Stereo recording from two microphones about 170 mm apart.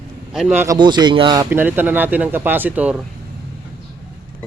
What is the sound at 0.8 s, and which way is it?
Speech, 25° right (ahead or behind).